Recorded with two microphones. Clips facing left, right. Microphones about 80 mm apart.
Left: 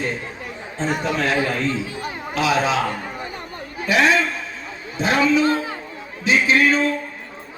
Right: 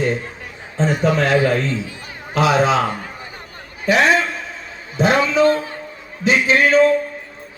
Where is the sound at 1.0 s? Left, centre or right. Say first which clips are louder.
Right 6 dB; right.